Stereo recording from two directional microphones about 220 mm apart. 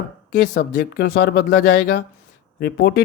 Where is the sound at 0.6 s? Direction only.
45° left (ahead or behind).